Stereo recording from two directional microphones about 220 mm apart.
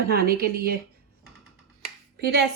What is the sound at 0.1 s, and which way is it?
Speech, 45° right (ahead or behind).